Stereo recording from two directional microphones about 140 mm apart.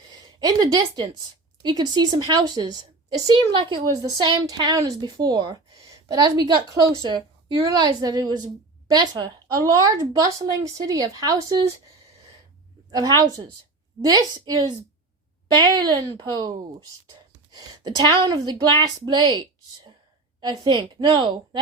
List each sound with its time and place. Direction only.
0.1 s a woman's voice: 30° right (ahead or behind)
12.9 s a woman's voice: 25° right (ahead or behind)
17.5 s a woman's voice: 30° right (ahead or behind)
20.9 s a woman's voice: 35° right (ahead or behind)